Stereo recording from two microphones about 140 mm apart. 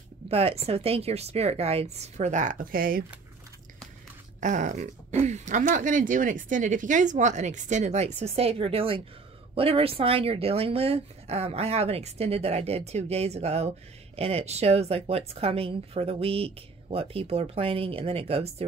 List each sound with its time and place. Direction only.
0.3 s speech: 45° right (ahead or behind); by 3.1 s 90° right
4.4 s speech: 60° right (ahead or behind); by 18.7 s 45° right (ahead or behind)